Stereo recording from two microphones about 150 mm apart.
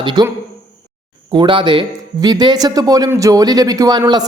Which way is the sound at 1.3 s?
30° right (ahead or behind).